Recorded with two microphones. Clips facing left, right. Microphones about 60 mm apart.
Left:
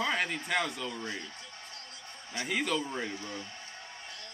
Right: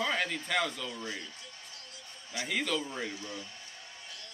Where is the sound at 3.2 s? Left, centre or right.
Left.